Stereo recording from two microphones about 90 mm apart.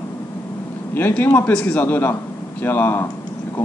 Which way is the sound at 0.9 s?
25° left (ahead or behind).